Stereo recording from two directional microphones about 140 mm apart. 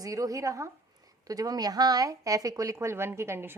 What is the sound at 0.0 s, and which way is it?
Speech, 25° right (ahead or behind).